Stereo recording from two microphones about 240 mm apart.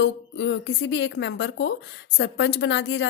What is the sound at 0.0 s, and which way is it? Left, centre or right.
A woman's voice, left.